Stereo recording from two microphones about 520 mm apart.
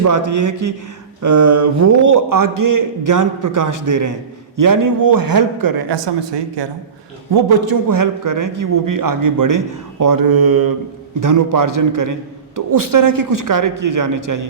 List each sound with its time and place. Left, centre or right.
0.0 s a man's voice: right